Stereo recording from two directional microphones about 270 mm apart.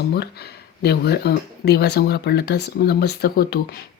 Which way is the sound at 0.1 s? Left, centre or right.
Left.